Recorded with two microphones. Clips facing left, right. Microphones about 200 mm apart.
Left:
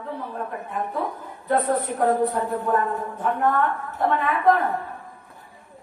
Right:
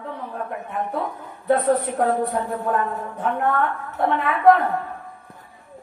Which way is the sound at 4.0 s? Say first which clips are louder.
Right 2 dB; 65° right (ahead or behind).